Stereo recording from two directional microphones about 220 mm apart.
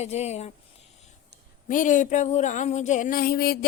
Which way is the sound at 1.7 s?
35° left (ahead or behind).